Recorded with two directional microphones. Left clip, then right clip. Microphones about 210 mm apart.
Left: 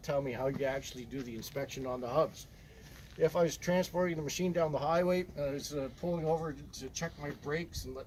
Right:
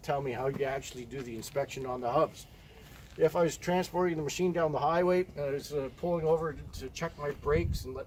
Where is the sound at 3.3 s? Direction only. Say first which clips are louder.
Right 2 dB; 30° right (ahead or behind); by 6.1 s 10° right (ahead or behind).